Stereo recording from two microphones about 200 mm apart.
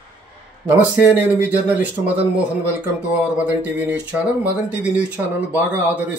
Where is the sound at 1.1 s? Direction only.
10° right (ahead or behind).